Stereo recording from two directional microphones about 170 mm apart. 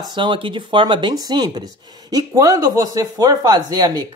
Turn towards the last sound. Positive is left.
turn(degrees=-25)  # may be behind; listen again after turning